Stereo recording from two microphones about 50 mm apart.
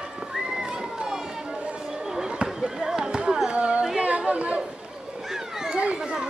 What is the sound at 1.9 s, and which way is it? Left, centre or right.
Basketball bounce, centre.